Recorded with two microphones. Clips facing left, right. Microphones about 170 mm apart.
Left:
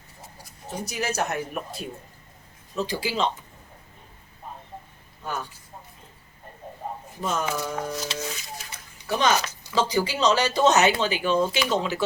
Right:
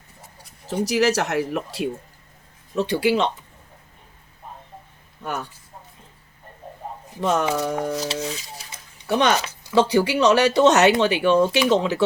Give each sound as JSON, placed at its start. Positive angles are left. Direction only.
{"t": 0.7, "sound": "speech", "side_deg": -90}
{"t": 2.7, "sound": "speech", "side_deg": -70}
{"t": 7.2, "sound": "speech", "side_deg": -70}
{"t": 7.4, "sound": "speech", "side_deg": -30}
{"t": 9.0, "sound": "speech", "side_deg": -65}
{"t": 11.6, "sound": "speech", "side_deg": -25}